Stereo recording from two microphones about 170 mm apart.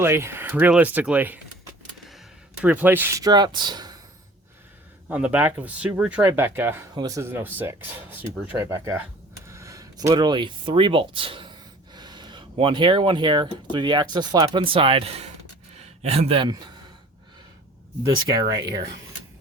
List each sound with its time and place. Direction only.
0.0 s speech: 15° right (ahead or behind)
5.0 s speech: 10° right (ahead or behind); by 16.6 s 30° right (ahead or behind)
18.0 s speech: 20° right (ahead or behind)
18.4 s speech: 90° right